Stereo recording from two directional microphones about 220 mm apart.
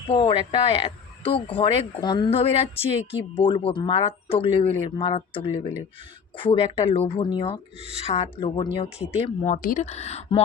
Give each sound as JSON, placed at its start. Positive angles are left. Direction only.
{"t": 0.1, "sound": "speech", "side_deg": 20}